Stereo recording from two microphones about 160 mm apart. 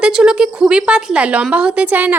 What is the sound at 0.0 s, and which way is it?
A woman's voice, 5° right (ahead or behind).